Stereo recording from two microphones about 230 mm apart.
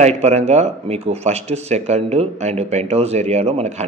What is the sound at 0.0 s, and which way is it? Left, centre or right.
Speech, right.